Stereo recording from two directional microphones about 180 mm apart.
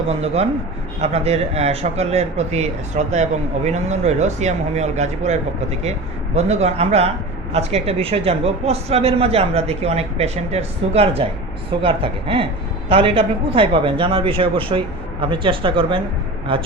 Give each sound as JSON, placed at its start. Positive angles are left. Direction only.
{"t": 0.1, "sound": "speech", "side_deg": -35}